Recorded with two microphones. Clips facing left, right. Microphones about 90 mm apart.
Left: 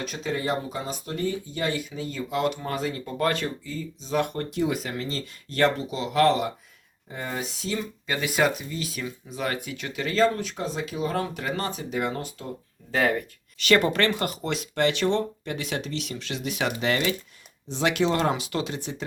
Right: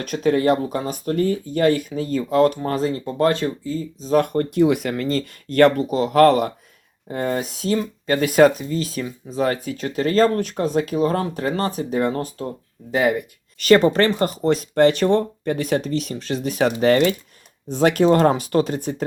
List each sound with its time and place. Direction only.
0.0 s speech: 55° right (ahead or behind)
12.9 s speech: 15° right (ahead or behind)
13.6 s speech: 35° right (ahead or behind)